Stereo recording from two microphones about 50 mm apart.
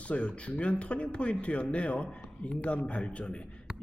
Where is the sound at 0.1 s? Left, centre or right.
Left.